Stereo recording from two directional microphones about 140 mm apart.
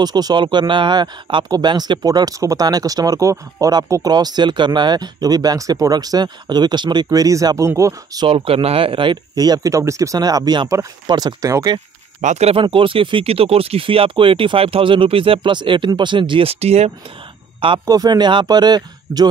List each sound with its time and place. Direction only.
0.0 s speech: 30° right (ahead or behind)
8.3 s speech: 40° right (ahead or behind)
12.2 s speech: 55° right (ahead or behind)
12.6 s speech: 40° right (ahead or behind)
17.8 s speech: 25° right (ahead or behind)